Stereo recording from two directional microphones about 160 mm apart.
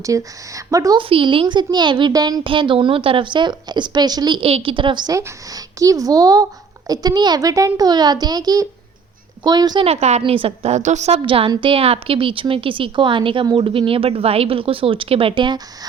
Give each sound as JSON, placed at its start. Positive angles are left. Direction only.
{"t": 0.0, "sound": "a woman's voice", "side_deg": -20}
{"t": 1.0, "sound": "a woman's voice", "side_deg": -35}
{"t": 9.8, "sound": "a woman's voice", "side_deg": -40}